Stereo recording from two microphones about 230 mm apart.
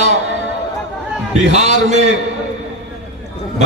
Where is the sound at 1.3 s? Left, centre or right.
Right.